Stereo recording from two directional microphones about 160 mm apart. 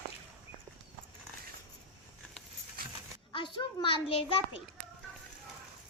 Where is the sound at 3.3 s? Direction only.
30° left (ahead or behind).